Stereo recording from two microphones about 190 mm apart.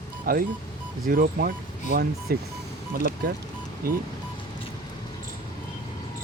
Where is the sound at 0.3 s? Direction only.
50° right (ahead or behind).